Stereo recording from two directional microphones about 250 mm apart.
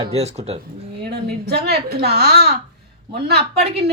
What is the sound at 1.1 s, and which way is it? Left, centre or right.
A woman's voice, right.